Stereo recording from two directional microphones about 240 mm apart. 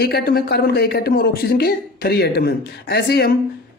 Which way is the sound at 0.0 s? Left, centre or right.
Left.